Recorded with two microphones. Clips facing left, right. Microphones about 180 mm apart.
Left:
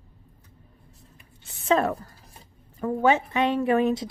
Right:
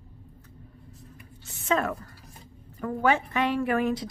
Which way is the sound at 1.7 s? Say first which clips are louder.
Left 4 dB; 35° left (ahead or behind).